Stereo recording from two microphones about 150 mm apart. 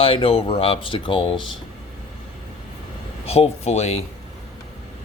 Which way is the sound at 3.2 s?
40° left (ahead or behind).